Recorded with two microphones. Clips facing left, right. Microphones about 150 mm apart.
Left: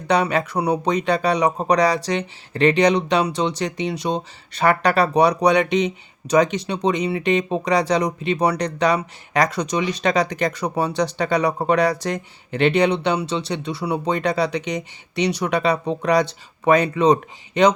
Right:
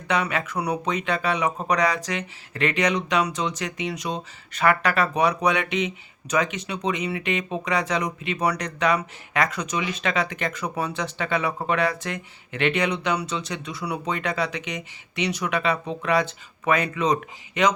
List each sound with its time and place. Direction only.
0.1 s speech: 35° left (ahead or behind)